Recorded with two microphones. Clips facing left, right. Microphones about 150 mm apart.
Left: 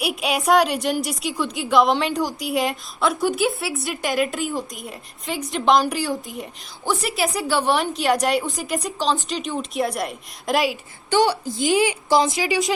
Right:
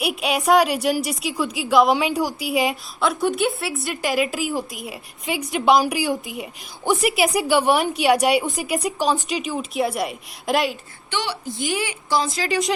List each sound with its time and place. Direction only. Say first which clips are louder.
0.0 s a woman's voice: right 1 dB; centre (ahead or behind)
11.1 s a woman's voice: left 9 dB; 45° left (ahead or behind)
11.6 s speech: left 7 dB; 20° left (ahead or behind)
12.5 s a woman's voice: even; centre (ahead or behind)